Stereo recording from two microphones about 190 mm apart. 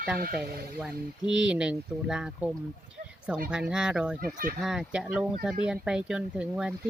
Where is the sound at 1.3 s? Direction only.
5° right (ahead or behind).